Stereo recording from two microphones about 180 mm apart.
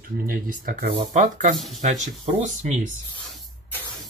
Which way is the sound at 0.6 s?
50° right (ahead or behind).